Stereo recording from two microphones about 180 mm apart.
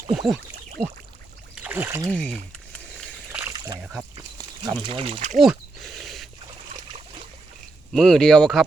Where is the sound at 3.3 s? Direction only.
15° right (ahead or behind).